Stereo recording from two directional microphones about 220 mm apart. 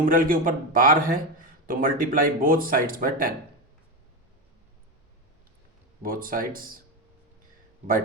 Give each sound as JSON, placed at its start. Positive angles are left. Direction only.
{"t": 0.0, "sound": "a man's voice", "side_deg": -40}
{"t": 6.0, "sound": "a man's voice", "side_deg": -40}